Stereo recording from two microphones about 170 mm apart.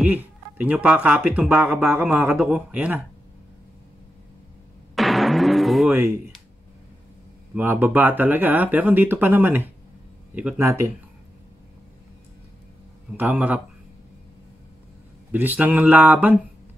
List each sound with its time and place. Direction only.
0.0 s speech: 10° right (ahead or behind)
4.9 s timpani: centre (ahead or behind)
5.9 s speech: 10° right (ahead or behind)
7.5 s speech: 10° right (ahead or behind)
13.2 s speech: 10° right (ahead or behind)
15.3 s speech: 10° right (ahead or behind)